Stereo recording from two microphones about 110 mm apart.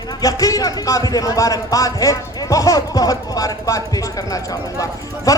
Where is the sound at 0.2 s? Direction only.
35° left (ahead or behind).